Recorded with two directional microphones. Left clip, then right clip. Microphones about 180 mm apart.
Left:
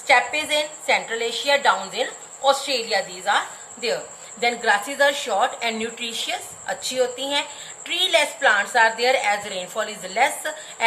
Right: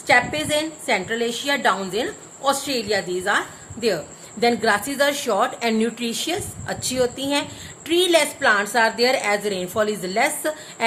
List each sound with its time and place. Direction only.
0.1 s a woman's voice: 50° right (ahead or behind)